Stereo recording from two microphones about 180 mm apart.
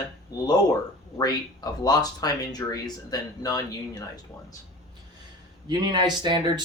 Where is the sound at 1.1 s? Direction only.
20° left (ahead or behind).